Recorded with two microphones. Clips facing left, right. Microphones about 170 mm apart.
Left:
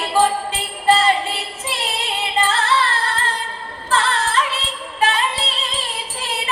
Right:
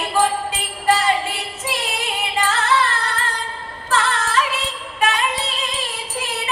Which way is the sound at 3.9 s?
30° left (ahead or behind).